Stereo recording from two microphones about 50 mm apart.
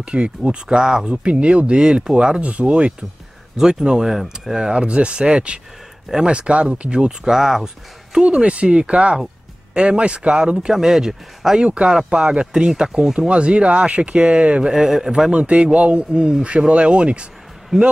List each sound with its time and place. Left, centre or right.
0.0 s speech: centre
4.7 s speech: right
11.6 s speech: right
13.3 s speech: right
15.3 s speech: right
17.7 s speech: centre